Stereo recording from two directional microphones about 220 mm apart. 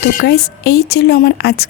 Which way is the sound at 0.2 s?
45° left (ahead or behind).